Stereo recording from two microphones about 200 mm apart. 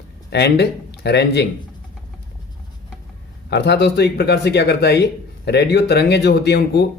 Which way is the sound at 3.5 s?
55° left (ahead or behind).